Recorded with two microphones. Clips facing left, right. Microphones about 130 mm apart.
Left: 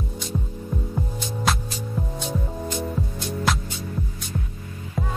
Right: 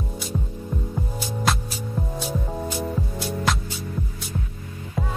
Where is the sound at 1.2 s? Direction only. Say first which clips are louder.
Right 1 dB; centre (ahead or behind).